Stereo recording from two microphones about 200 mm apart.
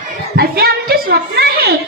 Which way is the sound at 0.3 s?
50° right (ahead or behind).